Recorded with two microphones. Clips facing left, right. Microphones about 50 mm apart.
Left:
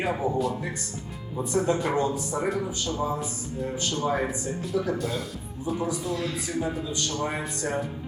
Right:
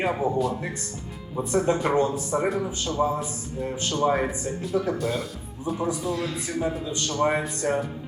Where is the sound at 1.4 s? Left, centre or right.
Right.